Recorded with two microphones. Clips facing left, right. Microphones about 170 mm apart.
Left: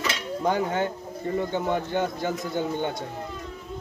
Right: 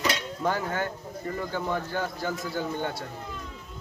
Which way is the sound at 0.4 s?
20° left (ahead or behind).